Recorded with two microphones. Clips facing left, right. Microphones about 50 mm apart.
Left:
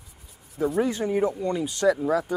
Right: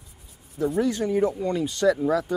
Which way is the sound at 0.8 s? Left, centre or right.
Centre.